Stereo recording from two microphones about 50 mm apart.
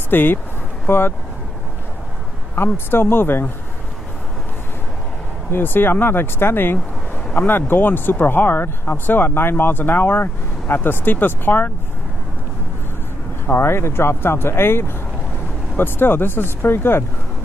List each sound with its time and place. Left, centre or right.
0.1 s speech: left
2.5 s speech: left
5.5 s speech: left
13.5 s speech: left